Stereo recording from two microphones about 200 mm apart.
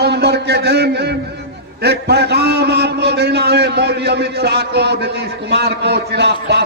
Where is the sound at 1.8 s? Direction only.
55° right (ahead or behind).